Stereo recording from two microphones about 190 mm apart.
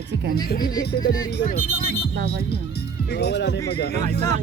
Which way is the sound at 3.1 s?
60° left (ahead or behind).